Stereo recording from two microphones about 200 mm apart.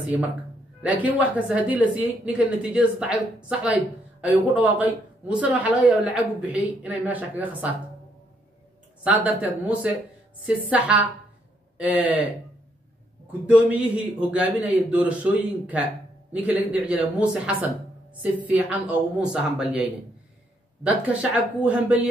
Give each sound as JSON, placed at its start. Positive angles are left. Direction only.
{"t": 0.8, "sound": "a woman's voice", "side_deg": -10}
{"t": 9.0, "sound": "a woman's voice", "side_deg": -5}
{"t": 13.5, "sound": "a woman's voice", "side_deg": -5}